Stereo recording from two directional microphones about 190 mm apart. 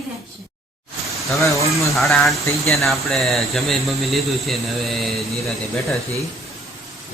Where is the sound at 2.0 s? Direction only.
Centre (ahead or behind).